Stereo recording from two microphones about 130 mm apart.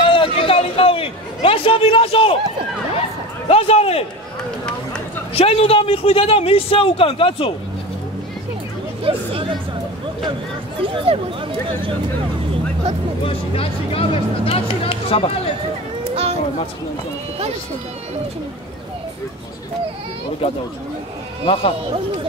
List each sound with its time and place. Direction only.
0.0 s chatter: 40° left (ahead or behind)
3.4 s a sound: 50° left (ahead or behind)
5.3 s a man's voice: 50° left (ahead or behind)
9.0 s chatter: 45° right (ahead or behind)
10.8 s speech: 40° right (ahead or behind)
13.2 s a man's voice: 45° left (ahead or behind)
16.0 s a sound: 50° right (ahead or behind)
20.4 s a man's voice: 45° left (ahead or behind)